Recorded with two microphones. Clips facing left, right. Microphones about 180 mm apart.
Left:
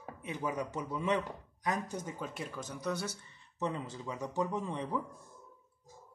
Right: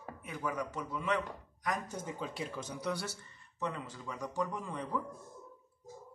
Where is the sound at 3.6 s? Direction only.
20° left (ahead or behind).